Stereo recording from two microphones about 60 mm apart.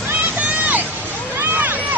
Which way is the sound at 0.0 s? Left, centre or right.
Right.